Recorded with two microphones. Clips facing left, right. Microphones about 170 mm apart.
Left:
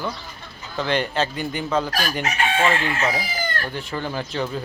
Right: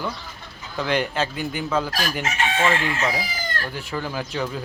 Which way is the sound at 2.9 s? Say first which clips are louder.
Left 1 dB; 20° left (ahead or behind).